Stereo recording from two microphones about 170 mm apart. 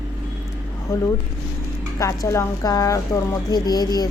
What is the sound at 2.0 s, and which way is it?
A woman's voice, 15° left (ahead or behind).